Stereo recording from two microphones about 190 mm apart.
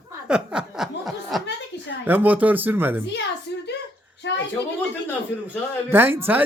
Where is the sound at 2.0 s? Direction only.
10° right (ahead or behind).